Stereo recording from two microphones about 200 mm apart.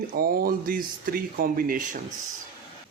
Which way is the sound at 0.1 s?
45° right (ahead or behind).